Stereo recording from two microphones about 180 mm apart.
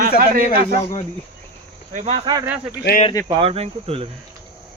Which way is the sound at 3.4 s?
35° right (ahead or behind).